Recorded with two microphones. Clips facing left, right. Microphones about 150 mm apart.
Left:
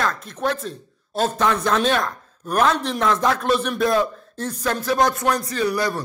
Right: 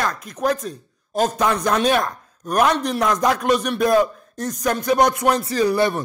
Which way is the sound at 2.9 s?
10° right (ahead or behind).